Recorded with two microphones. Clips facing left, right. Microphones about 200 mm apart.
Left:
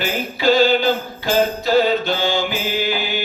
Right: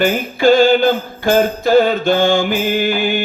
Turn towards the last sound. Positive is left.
turn(degrees=-50)  # may be behind; listen again after turning